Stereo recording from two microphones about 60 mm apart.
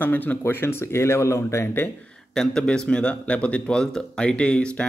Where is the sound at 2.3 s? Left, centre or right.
Centre.